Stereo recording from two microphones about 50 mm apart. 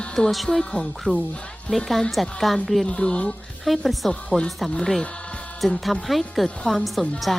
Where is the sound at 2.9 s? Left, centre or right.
Centre.